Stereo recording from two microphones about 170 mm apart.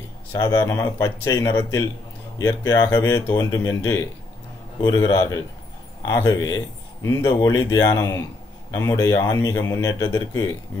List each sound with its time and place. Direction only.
0.3 s speech: 20° left (ahead or behind)